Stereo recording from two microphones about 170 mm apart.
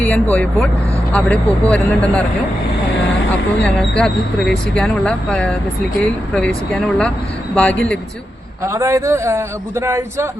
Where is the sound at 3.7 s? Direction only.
5° left (ahead or behind).